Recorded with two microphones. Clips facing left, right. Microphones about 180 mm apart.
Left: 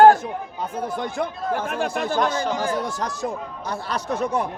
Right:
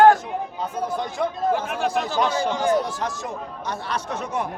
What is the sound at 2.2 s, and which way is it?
Speech, 10° right (ahead or behind).